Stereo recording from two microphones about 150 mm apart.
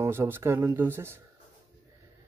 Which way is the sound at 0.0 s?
15° right (ahead or behind).